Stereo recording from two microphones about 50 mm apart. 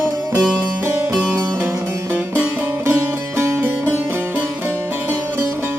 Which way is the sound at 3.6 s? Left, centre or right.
Right.